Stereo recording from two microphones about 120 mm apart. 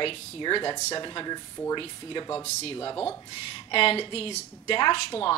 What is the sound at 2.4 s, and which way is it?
Speech, 70° left (ahead or behind).